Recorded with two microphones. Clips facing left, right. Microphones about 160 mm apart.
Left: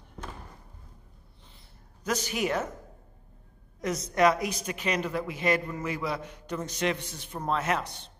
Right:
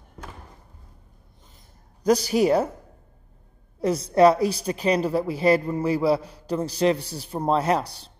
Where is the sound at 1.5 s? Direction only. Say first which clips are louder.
Right 1 dB; 40° right (ahead or behind).